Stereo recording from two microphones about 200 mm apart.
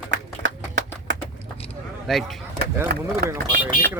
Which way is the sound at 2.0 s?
Centre (ahead or behind).